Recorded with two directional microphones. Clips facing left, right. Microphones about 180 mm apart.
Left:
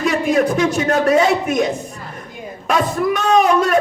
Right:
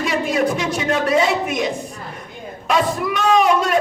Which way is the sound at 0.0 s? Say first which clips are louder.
Left 3 dB; 50° left (ahead or behind).